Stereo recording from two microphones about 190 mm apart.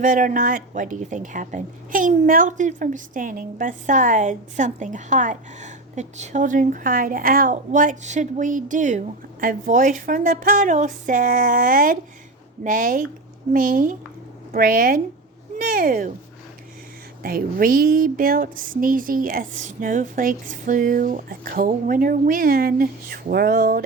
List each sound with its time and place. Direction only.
0.0 s a woman's voice: 45° right (ahead or behind)
17.2 s a woman's voice: 50° right (ahead or behind)